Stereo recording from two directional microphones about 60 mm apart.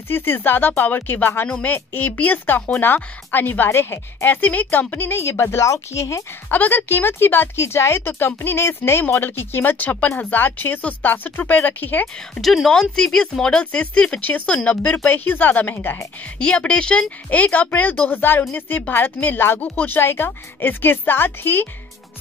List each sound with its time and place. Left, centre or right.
0.1 s speech: left
4.9 s speech: left
6.5 s speech: left
12.4 s speech: centre; by 16.0 s left
16.3 s speech: centre; by 21.6 s left